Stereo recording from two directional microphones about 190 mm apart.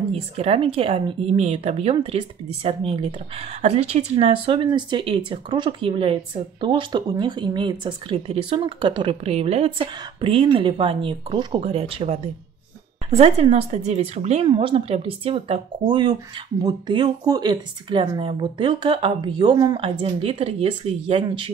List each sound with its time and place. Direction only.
0.1 s a woman's voice: 30° right (ahead or behind)